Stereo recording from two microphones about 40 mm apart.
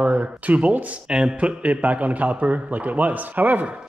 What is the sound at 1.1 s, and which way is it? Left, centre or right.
Speech, right.